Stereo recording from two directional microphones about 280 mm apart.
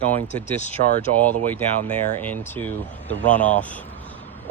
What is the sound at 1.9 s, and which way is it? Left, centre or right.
Speech, centre.